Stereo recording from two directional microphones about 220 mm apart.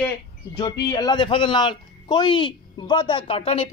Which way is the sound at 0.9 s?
20° left (ahead or behind).